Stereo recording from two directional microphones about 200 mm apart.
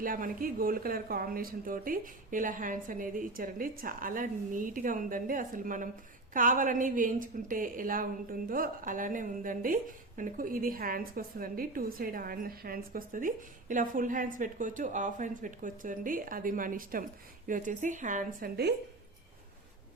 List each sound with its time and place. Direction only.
0.0 s a woman's voice: 45° right (ahead or behind)